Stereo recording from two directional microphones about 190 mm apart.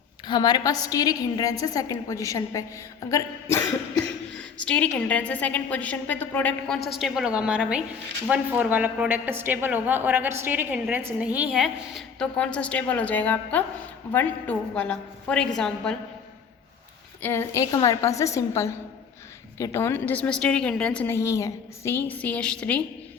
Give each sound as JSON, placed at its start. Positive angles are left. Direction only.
{"t": 0.3, "sound": "a woman's voice", "side_deg": 25}
{"t": 4.6, "sound": "a woman's voice", "side_deg": 5}
{"t": 17.2, "sound": "a woman's voice", "side_deg": 15}